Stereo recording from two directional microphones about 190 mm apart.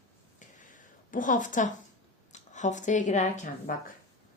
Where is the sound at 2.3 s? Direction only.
40° left (ahead or behind).